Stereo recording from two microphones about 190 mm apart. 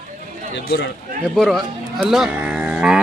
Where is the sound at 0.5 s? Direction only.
60° left (ahead or behind).